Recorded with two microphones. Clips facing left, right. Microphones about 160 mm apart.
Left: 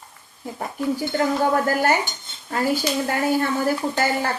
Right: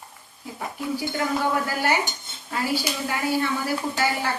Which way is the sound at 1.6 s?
50° left (ahead or behind).